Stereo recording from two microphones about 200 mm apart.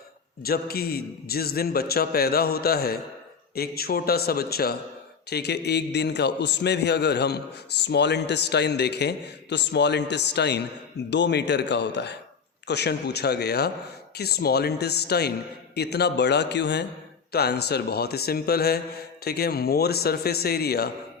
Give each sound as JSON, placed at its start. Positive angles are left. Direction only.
{"t": 0.4, "sound": "a man's voice", "side_deg": 50}